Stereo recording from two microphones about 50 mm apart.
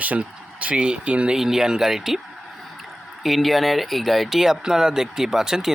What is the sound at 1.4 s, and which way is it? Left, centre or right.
Speech, centre.